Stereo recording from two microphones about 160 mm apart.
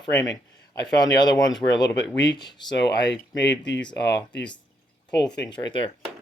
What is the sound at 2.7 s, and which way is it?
Speech, 90° left.